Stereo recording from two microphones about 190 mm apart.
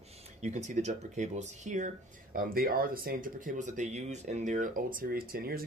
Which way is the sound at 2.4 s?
50° right (ahead or behind).